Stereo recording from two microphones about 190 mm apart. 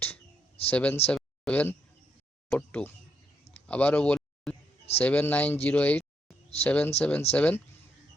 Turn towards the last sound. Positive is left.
turn(degrees=5)  # may be behind; listen again after turning